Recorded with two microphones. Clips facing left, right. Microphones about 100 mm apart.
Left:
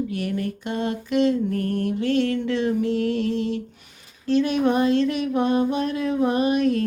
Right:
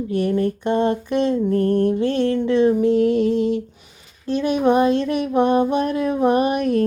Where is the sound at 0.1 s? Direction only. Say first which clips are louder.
Right 7 dB; 30° right (ahead or behind).